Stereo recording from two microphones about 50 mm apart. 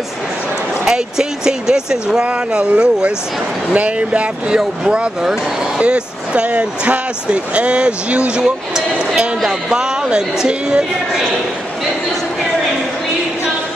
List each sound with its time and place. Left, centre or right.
0.8 s speech: centre
2.2 s speech: right